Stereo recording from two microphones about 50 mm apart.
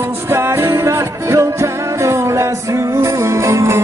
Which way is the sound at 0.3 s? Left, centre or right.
Right.